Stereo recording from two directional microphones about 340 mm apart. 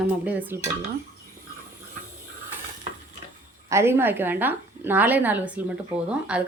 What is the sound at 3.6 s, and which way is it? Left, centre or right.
A woman's voice, centre.